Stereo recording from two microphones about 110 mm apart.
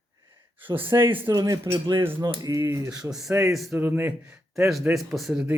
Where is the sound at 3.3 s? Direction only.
30° right (ahead or behind).